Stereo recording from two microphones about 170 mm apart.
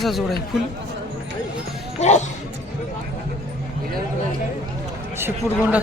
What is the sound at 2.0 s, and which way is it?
Speech, 45° left (ahead or behind).